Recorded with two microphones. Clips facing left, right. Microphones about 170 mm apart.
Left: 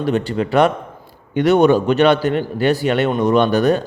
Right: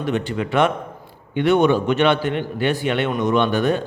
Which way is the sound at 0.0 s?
35° left (ahead or behind).